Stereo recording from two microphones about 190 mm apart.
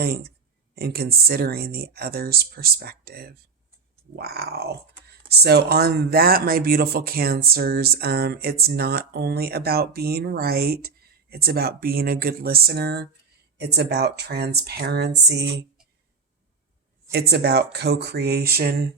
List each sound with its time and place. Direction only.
0.0 s speech: 55° right (ahead or behind)
17.1 s speech: 60° right (ahead or behind)